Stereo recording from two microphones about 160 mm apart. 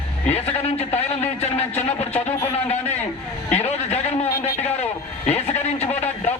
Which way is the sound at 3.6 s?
40° left (ahead or behind).